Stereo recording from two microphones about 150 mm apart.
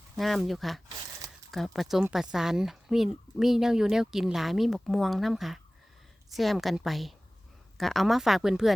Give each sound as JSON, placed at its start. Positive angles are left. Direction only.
{"t": 0.2, "sound": "speech", "side_deg": 0}